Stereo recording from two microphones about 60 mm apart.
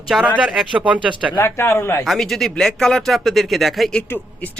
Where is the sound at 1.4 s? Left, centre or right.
Left.